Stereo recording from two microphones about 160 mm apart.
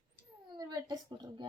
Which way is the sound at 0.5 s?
25° right (ahead or behind).